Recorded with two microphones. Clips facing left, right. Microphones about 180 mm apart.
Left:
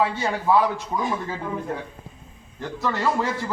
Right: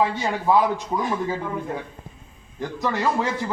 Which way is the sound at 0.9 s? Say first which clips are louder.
Right 1 dB; 10° right (ahead or behind).